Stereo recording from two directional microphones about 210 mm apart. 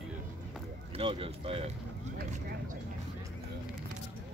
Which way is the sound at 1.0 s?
25° right (ahead or behind).